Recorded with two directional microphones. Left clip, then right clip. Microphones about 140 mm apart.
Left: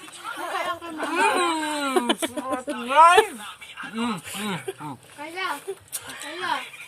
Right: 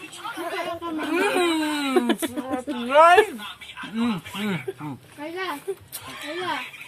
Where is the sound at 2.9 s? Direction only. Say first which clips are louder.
Even; 5° right (ahead or behind).